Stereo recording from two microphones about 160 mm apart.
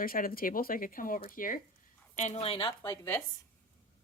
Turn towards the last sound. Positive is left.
turn(degrees=15)  # may be behind; listen again after turning